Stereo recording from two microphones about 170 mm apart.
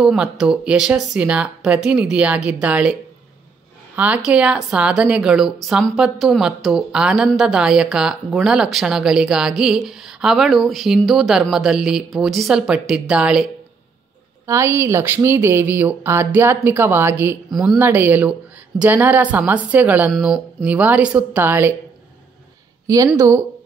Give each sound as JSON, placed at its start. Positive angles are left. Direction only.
{"t": 0.0, "sound": "a woman's voice", "side_deg": -5}
{"t": 14.4, "sound": "speech", "side_deg": -15}
{"t": 23.1, "sound": "speech", "side_deg": -15}